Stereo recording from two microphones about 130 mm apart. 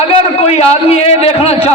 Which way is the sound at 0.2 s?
55° left (ahead or behind).